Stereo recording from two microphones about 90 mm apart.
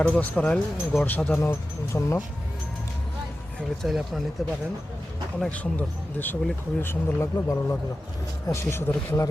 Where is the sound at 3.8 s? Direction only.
Centre (ahead or behind).